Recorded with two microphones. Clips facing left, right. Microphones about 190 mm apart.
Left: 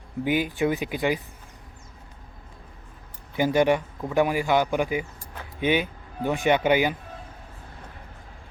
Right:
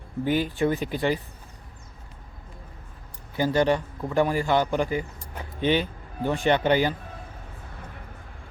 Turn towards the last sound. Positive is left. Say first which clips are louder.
# left 1 dB
turn(degrees=10)  # may be behind; listen again after turning